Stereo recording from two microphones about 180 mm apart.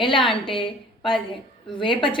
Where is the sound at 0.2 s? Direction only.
Centre (ahead or behind).